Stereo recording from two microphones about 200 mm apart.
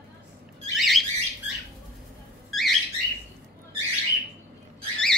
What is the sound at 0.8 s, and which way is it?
Bird, centre (ahead or behind).